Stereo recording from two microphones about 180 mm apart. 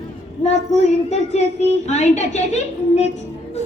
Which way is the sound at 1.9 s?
40° left (ahead or behind).